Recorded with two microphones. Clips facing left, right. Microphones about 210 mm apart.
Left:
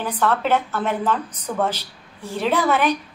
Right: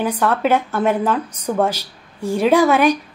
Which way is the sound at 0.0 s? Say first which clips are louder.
Right 3 dB; 10° right (ahead or behind).